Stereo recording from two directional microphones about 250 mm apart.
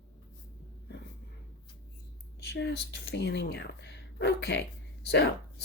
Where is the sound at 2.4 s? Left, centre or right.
Left.